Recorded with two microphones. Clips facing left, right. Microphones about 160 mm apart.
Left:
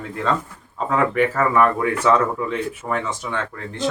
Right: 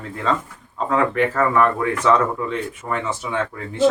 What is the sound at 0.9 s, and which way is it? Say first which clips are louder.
A man's voice: even; 5° left (ahead or behind).